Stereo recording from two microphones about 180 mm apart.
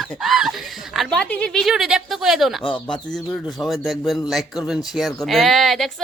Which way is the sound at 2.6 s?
30° left (ahead or behind).